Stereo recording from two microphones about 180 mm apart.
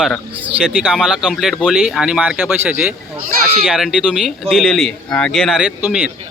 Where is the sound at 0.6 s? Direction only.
5° right (ahead or behind).